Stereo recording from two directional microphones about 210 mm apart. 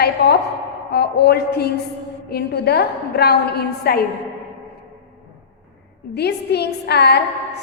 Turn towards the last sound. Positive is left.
turn(degrees=50)  # may be behind; listen again after turning